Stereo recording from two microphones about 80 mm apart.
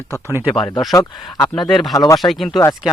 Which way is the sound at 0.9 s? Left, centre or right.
Left.